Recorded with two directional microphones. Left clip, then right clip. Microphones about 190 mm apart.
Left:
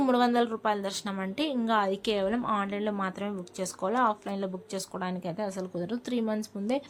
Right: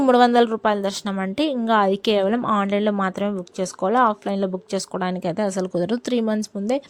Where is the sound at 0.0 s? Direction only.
40° right (ahead or behind).